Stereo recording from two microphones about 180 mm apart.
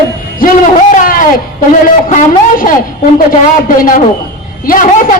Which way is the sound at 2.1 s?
50° left (ahead or behind).